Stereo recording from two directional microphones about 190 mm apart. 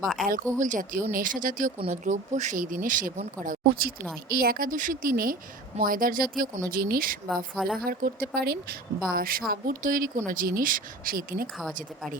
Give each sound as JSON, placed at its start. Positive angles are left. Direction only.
{"t": 0.0, "sound": "a woman's voice", "side_deg": 0}
{"t": 0.6, "sound": "speech", "side_deg": -45}
{"t": 7.5, "sound": "a woman's voice", "side_deg": 0}
{"t": 7.9, "sound": "speech", "side_deg": -50}